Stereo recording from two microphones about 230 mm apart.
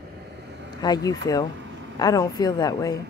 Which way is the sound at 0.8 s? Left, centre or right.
Centre.